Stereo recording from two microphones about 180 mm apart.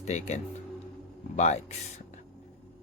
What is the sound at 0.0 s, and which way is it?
Speech, 40° left (ahead or behind).